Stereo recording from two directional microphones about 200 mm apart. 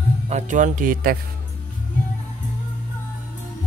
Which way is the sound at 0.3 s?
35° right (ahead or behind).